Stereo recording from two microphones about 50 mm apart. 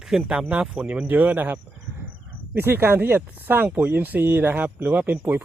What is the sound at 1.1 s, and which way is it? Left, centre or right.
Speech, right.